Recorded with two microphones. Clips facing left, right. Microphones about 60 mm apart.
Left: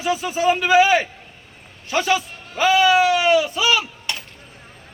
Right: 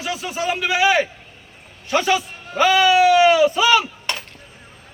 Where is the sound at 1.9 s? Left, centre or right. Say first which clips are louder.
Right 1 dB; centre.